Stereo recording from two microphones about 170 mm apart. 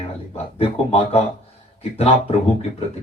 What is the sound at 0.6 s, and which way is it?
Speech, 35° left (ahead or behind).